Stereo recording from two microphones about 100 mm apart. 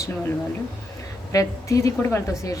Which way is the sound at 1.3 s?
35° left (ahead or behind).